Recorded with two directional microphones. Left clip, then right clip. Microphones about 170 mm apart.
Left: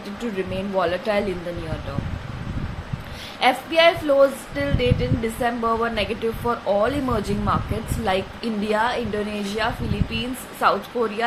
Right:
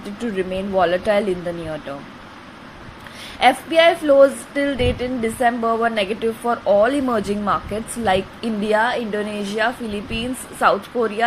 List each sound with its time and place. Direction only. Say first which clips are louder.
0.2 s a woman's voice: right 4 dB; 25° right (ahead or behind)
3.4 s a woman's voice: right 3 dB; 30° right (ahead or behind)